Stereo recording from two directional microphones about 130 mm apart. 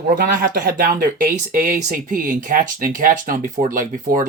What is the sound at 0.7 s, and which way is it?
Speech, 90° right.